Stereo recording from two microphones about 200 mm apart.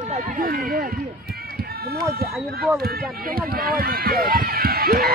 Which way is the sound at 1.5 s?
50° right (ahead or behind).